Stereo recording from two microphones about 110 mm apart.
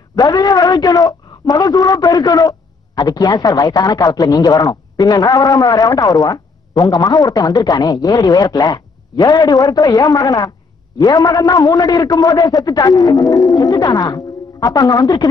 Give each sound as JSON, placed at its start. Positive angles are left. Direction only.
{"t": 0.1, "sound": "a man's voice", "side_deg": 35}